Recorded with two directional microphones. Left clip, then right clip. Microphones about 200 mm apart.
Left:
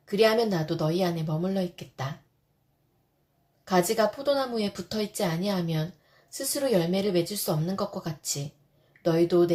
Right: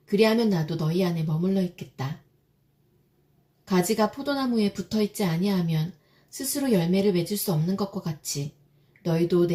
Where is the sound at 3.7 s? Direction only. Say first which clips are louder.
Left 1 dB; 30° left (ahead or behind).